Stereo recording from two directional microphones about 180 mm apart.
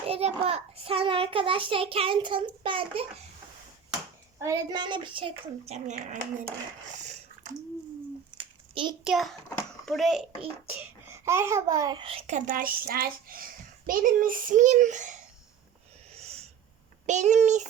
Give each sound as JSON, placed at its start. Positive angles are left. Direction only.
{"t": 0.1, "sound": "a child's voice", "side_deg": -35}
{"t": 4.4, "sound": "a child's voice", "side_deg": -20}
{"t": 8.4, "sound": "a sound", "side_deg": -30}
{"t": 9.0, "sound": "a child's voice", "side_deg": 0}
{"t": 11.1, "sound": "a child's voice", "side_deg": -15}
{"t": 12.5, "sound": "a child's voice", "side_deg": -50}
{"t": 16.1, "sound": "snort", "side_deg": -35}
{"t": 17.1, "sound": "a child's voice", "side_deg": -40}